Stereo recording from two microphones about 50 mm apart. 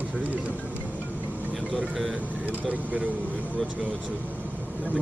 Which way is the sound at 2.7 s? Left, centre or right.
Right.